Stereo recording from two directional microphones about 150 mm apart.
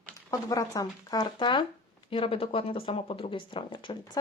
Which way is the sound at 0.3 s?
20° left (ahead or behind).